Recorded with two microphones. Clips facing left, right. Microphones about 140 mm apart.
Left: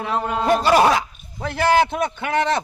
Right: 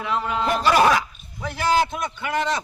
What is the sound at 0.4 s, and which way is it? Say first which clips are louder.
Speech: left 3 dB; 30° left (ahead or behind).